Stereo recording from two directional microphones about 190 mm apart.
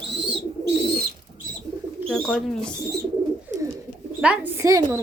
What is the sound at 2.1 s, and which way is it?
Speech, 5° left (ahead or behind).